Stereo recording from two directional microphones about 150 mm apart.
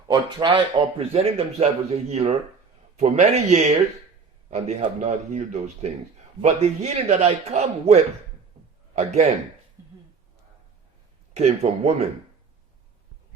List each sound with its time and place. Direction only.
0.1 s a man's voice: 30° right (ahead or behind); by 9.2 s 45° right (ahead or behind)
11.3 s a man's voice: 45° right (ahead or behind)